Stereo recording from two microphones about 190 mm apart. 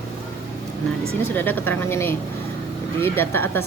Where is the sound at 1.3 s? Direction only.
10° left (ahead or behind).